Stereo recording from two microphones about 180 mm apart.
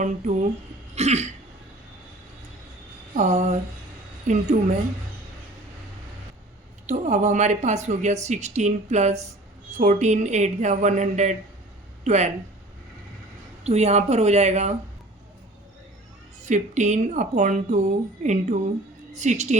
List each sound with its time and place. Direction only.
0.0 s speech: 40° right (ahead or behind)
3.2 s speech: 40° right (ahead or behind)
6.8 s speech: 40° right (ahead or behind)
13.7 s speech: 35° right (ahead or behind)
16.5 s speech: 40° right (ahead or behind)